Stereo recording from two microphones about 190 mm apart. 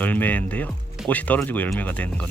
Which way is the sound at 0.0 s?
10° left (ahead or behind).